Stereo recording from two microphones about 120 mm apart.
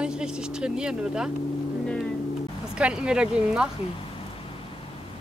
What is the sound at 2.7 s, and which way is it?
Speech, 5° right (ahead or behind).